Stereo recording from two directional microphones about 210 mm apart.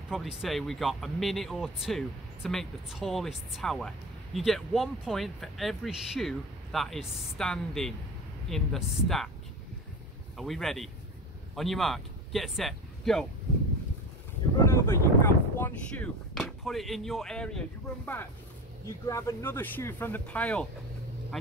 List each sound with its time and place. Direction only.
0.1 s speech: centre (ahead or behind)
10.3 s speech: centre (ahead or behind)
14.7 s speech: 10° left (ahead or behind)